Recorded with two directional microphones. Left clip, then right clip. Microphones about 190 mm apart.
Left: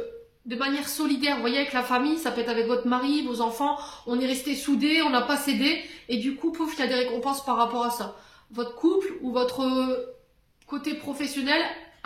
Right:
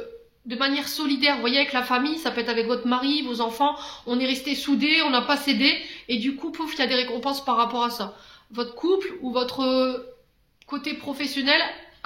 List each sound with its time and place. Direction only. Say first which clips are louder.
0.5 s a woman's voice: right 3 dB; 30° right (ahead or behind)